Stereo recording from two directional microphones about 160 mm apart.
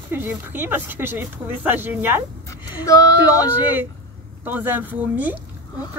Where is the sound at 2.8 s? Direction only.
20° left (ahead or behind).